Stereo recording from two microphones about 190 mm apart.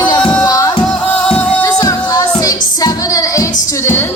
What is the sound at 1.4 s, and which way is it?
Music, 10° left (ahead or behind).